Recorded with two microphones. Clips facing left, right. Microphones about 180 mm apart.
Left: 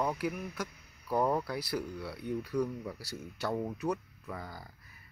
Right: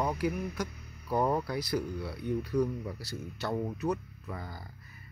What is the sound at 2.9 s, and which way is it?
Speech, 10° left (ahead or behind).